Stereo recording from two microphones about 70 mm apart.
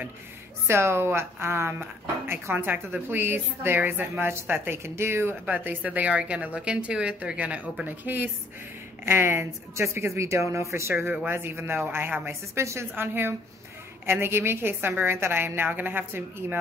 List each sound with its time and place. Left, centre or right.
0.7 s speech: right
5.6 s a woman's voice: right
9.0 s speech: right